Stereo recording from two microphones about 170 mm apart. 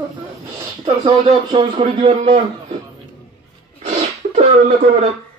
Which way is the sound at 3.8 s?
45° right (ahead or behind).